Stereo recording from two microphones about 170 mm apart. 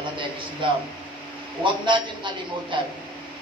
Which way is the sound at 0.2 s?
30° right (ahead or behind).